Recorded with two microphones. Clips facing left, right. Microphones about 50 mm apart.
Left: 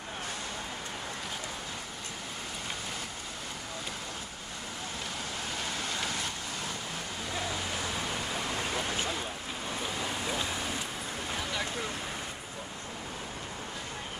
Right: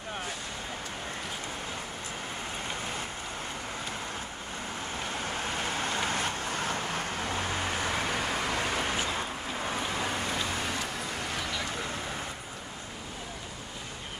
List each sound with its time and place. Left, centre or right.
5.2 s vehicle: right